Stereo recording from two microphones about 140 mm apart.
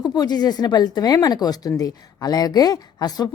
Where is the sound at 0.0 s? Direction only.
30° left (ahead or behind).